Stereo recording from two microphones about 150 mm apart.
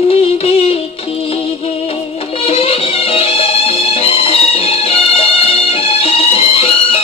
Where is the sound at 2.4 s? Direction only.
40° left (ahead or behind).